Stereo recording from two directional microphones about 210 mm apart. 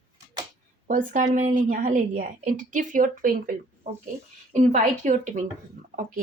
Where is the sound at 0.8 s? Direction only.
40° right (ahead or behind).